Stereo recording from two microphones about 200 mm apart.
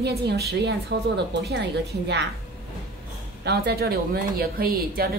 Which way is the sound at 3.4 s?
50° right (ahead or behind).